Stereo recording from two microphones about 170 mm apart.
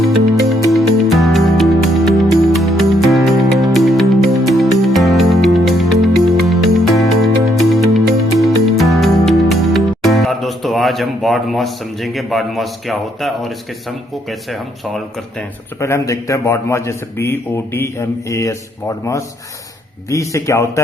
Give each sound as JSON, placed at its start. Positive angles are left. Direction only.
{"t": 0.0, "sound": "music", "side_deg": 0}
{"t": 14.3, "sound": "speech", "side_deg": 0}
{"t": 15.8, "sound": "a man's voice", "side_deg": 15}